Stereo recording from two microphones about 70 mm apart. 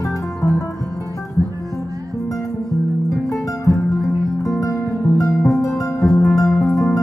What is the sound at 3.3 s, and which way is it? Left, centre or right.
Music, left.